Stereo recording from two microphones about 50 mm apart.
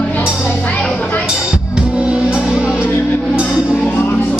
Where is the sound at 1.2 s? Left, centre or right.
Right.